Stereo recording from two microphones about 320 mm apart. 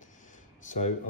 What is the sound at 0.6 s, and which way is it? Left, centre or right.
Speech, left.